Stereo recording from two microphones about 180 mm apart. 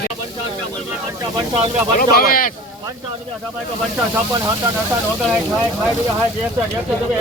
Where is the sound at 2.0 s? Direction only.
55° left (ahead or behind).